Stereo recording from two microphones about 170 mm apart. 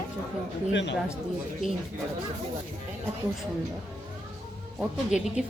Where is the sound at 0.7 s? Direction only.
90° left.